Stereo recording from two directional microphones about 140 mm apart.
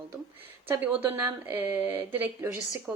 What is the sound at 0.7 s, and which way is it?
A woman's voice, 10° right (ahead or behind).